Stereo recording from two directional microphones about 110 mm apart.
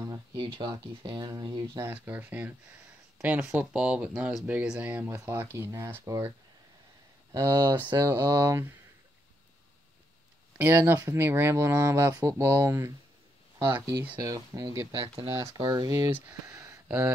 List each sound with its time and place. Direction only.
0.0 s a sound: 30° right (ahead or behind)
0.4 s speech: 45° right (ahead or behind)
1.8 s speech: 20° right (ahead or behind)
7.6 s speech: 20° right (ahead or behind)
10.6 s speech: 20° right (ahead or behind)
14.2 s speech: 35° right (ahead or behind)
16.1 s speech: 15° right (ahead or behind)
16.5 s a sound: 25° right (ahead or behind)